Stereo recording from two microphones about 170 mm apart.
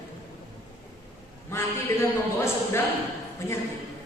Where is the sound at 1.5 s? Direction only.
15° left (ahead or behind).